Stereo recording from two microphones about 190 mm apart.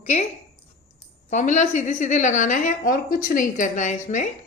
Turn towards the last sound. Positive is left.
turn(degrees=40)  # may be behind; listen again after turning